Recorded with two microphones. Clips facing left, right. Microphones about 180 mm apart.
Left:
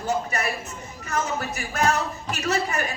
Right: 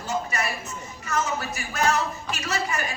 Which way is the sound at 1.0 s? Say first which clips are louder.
Even; 60° left (ahead or behind).